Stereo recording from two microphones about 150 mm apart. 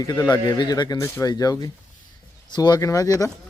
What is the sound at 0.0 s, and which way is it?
Speech, 25° left (ahead or behind).